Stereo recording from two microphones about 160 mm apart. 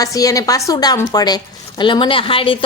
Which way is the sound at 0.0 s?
20° left (ahead or behind).